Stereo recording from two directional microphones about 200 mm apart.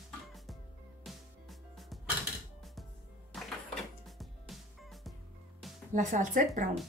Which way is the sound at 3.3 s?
Centre (ahead or behind).